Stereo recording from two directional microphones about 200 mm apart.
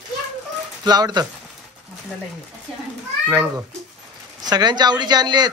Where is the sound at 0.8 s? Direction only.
20° right (ahead or behind).